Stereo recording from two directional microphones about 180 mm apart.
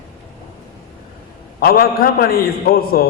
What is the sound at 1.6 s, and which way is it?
A man's voice, 55° left (ahead or behind).